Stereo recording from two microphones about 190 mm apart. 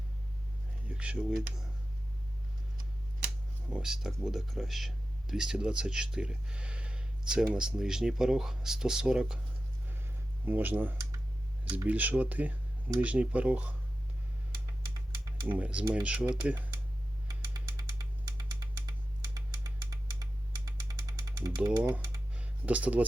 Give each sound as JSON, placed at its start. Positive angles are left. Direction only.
{"t": 0.9, "sound": "a sound", "side_deg": -5}
{"t": 3.7, "sound": "speech", "side_deg": -5}
{"t": 10.4, "sound": "speech", "side_deg": -10}
{"t": 15.1, "sound": "typing", "side_deg": -20}
{"t": 15.4, "sound": "speech", "side_deg": -5}
{"t": 17.7, "sound": "a sound", "side_deg": -20}
{"t": 20.7, "sound": "engine", "side_deg": -20}
{"t": 22.4, "sound": "speech", "side_deg": -5}